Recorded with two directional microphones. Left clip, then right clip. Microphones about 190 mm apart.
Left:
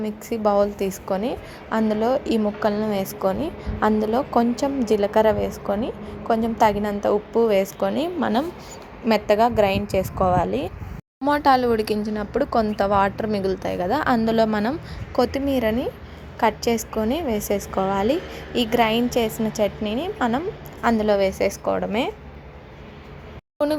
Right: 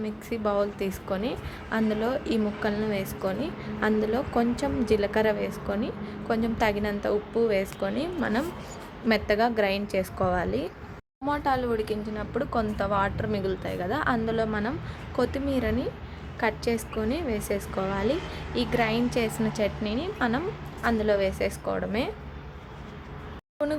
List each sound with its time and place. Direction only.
0.0 s a woman's voice: 20° left (ahead or behind)
11.3 s a woman's voice: 35° left (ahead or behind)
16.4 s a woman's voice: 25° left (ahead or behind)
20.8 s a woman's voice: 25° left (ahead or behind)